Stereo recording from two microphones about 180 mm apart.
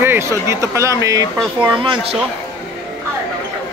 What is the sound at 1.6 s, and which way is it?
Male singing, 25° right (ahead or behind).